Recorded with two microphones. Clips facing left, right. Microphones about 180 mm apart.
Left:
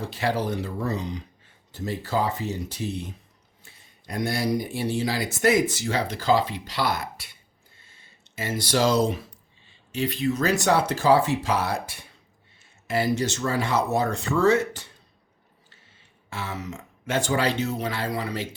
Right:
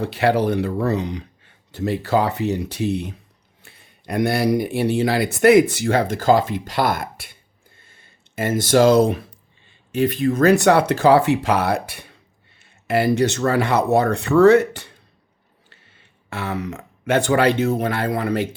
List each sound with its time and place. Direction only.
0.0 s speech: 65° right (ahead or behind)
7.8 s a sound: 55° right (ahead or behind)
9.6 s speech: 50° right (ahead or behind)